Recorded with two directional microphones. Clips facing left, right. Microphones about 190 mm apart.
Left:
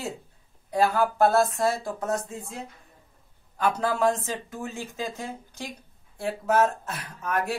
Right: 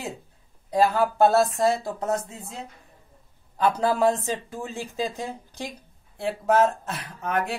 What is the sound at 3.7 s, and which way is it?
Speech, 35° right (ahead or behind).